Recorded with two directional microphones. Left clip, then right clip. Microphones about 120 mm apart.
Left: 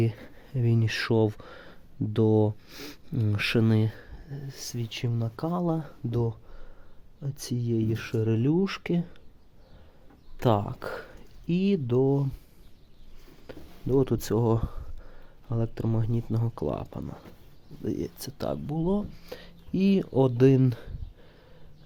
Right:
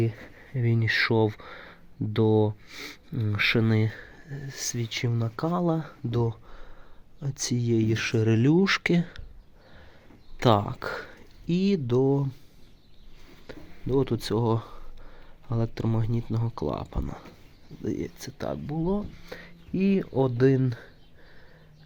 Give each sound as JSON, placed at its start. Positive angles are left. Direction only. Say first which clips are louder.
{"t": 0.0, "sound": "speech", "louder": "even", "side_deg": 30}
{"t": 0.3, "sound": "speech", "louder": "left 1 dB", "side_deg": 20}
{"t": 7.2, "sound": "speech", "louder": "right 5 dB", "side_deg": -10}
{"t": 10.4, "sound": "speech", "louder": "right 3 dB", "side_deg": 5}
{"t": 13.5, "sound": "speech", "louder": "left 1 dB", "side_deg": 30}
{"t": 15.4, "sound": "speech", "louder": "right 1 dB", "side_deg": 10}
{"t": 16.2, "sound": "speech", "louder": "even", "side_deg": 25}
{"t": 18.2, "sound": "speech", "louder": "left 1 dB", "side_deg": 30}